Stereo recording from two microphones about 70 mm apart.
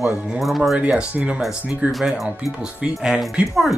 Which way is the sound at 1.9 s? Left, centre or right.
Centre.